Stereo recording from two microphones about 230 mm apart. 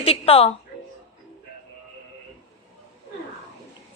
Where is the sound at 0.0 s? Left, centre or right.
Left.